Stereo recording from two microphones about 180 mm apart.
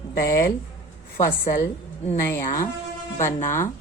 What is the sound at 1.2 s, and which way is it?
Speech, 50° left (ahead or behind).